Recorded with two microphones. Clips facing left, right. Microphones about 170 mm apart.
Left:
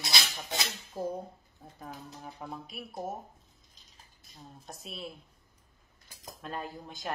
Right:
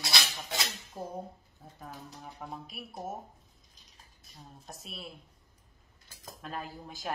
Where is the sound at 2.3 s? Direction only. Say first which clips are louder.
Even; centre (ahead or behind).